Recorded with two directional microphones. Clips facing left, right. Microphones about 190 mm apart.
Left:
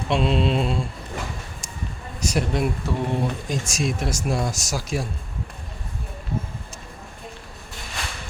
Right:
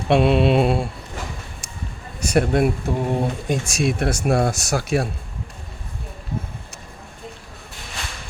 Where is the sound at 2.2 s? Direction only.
60° right (ahead or behind).